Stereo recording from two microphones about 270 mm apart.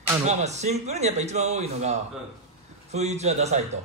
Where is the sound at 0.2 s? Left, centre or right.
Right.